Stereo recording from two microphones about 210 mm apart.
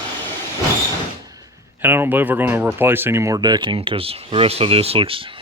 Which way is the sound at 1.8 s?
10° right (ahead or behind).